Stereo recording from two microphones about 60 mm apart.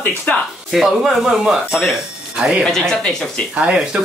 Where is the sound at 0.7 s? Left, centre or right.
Centre.